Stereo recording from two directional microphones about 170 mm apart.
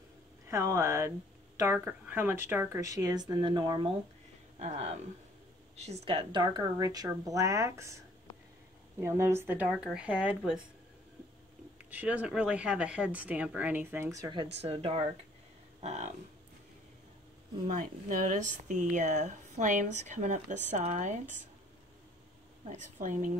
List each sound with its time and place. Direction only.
0.5 s speech: 15° right (ahead or behind)
4.6 s speech: 40° right (ahead or behind); by 8.0 s 15° right (ahead or behind)
9.0 s speech: 15° right (ahead or behind)
11.8 s speech: 10° right (ahead or behind)
14.6 s speech: 35° right (ahead or behind)
18.3 s speech: 45° right (ahead or behind)
22.7 s speech: 45° right (ahead or behind)